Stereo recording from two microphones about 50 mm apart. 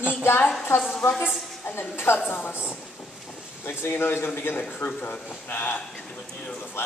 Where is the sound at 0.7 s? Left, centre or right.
Left.